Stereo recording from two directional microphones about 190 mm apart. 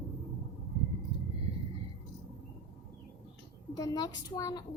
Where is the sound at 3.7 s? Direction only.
20° left (ahead or behind).